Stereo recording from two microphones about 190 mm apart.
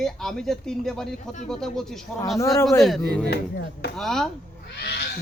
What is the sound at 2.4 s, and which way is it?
Speech, 15° left (ahead or behind).